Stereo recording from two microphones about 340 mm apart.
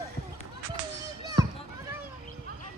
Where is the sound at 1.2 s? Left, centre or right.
Centre.